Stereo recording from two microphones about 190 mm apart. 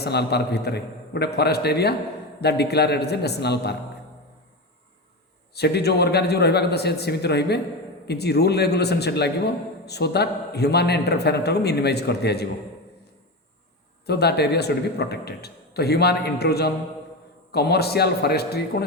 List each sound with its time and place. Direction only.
0.0 s a man's voice: 60° left (ahead or behind)
5.5 s a man's voice: 60° left (ahead or behind)
14.1 s a man's voice: 60° left (ahead or behind)